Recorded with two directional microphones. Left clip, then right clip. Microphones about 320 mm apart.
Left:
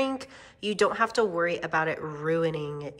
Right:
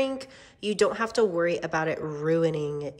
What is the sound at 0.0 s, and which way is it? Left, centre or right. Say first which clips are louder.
Speech: right 1 dB; centre.